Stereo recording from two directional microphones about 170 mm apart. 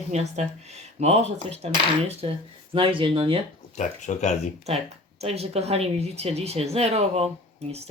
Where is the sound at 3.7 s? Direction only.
45° left (ahead or behind).